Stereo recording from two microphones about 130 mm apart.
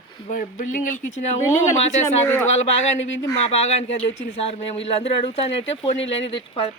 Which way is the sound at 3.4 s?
55° left (ahead or behind).